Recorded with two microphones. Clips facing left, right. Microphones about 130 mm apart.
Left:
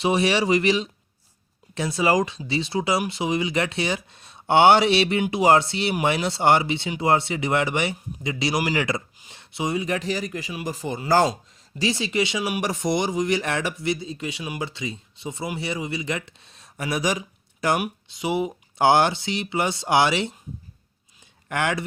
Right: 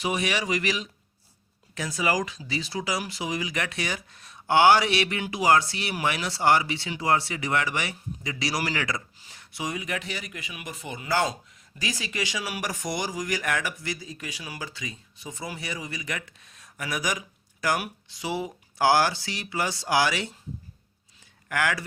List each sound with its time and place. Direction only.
0.0 s speech: 30° left (ahead or behind)
21.5 s speech: 25° left (ahead or behind)